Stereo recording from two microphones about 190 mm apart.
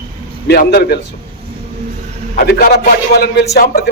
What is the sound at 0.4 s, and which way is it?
Speech, 55° left (ahead or behind).